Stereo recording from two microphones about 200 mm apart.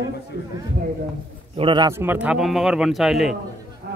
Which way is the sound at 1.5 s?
25° right (ahead or behind).